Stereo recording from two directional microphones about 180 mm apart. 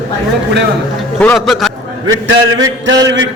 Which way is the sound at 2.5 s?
90° right.